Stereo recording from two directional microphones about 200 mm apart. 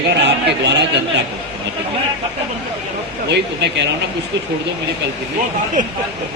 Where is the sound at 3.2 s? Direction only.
60° right (ahead or behind).